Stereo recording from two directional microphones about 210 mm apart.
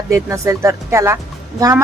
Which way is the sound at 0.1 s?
15° right (ahead or behind).